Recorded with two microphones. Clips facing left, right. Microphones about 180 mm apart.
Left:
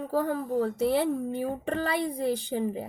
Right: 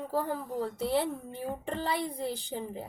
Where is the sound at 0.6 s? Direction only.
65° left (ahead or behind).